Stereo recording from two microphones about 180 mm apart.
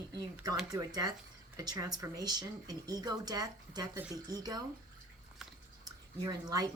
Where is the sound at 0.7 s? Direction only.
20° right (ahead or behind).